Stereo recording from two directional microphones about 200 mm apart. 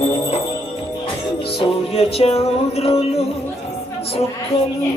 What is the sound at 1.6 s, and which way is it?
Music, 30° left (ahead or behind).